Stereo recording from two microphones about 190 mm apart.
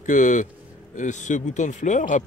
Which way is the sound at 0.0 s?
40° left (ahead or behind).